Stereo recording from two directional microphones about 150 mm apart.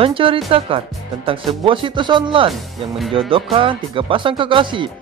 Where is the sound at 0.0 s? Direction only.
35° right (ahead or behind).